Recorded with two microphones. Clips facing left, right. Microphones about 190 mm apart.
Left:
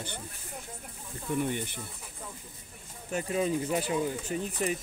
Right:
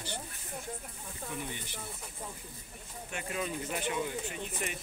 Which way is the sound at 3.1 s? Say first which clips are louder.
Left 8 dB; 35° left (ahead or behind).